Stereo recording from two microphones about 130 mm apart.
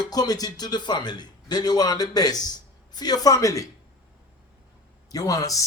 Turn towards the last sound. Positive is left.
turn(degrees=25)  # may be behind; listen again after turning